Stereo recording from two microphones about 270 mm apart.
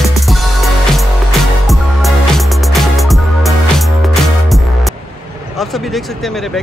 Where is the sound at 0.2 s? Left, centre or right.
Centre.